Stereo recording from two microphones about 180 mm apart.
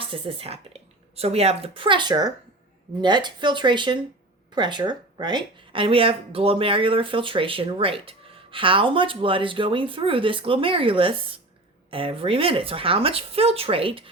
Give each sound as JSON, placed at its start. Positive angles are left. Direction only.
{"t": 0.0, "sound": "speech", "side_deg": -30}